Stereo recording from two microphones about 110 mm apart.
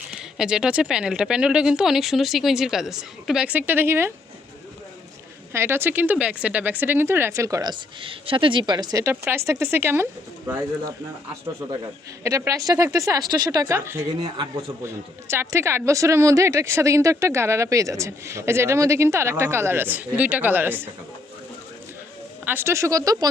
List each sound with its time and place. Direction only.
0.3 s speech: 5° right (ahead or behind); by 4.1 s 20° right (ahead or behind)
5.5 s speech: 20° right (ahead or behind)
7.7 s a woman's voice: 50° right (ahead or behind)
9.0 s speech: 20° right (ahead or behind)
12.2 s a woman's voice: 30° right (ahead or behind)
13.7 s speech: 25° right (ahead or behind)
22.4 s speech: 20° right (ahead or behind)